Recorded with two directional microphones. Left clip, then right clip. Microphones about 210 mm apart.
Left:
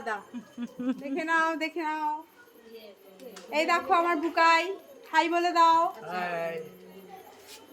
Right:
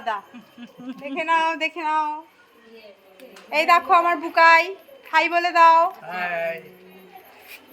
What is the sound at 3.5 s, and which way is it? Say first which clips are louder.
A woman's voice: right 8 dB; 35° right (ahead or behind).